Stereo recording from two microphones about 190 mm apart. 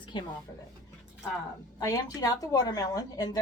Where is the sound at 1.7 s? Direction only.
20° left (ahead or behind).